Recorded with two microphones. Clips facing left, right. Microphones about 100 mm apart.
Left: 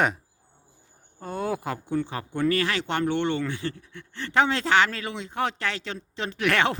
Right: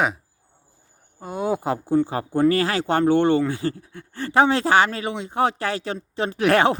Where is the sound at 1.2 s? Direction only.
10° right (ahead or behind).